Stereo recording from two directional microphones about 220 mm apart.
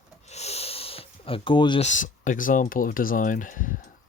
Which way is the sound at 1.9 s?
35° left (ahead or behind).